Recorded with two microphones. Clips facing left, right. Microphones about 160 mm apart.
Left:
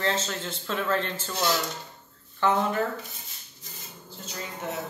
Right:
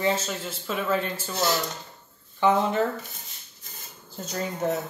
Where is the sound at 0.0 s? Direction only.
10° right (ahead or behind).